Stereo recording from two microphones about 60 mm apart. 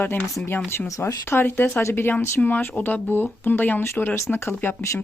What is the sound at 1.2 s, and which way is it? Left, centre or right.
Speech, left.